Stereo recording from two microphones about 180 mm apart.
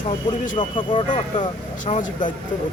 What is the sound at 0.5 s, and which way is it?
Speech, 25° left (ahead or behind).